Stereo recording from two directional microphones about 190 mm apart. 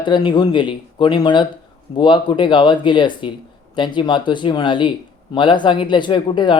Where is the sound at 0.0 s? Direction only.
25° left (ahead or behind).